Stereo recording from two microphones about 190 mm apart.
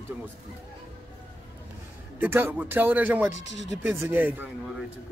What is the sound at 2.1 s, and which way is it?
A man's voice, 10° right (ahead or behind).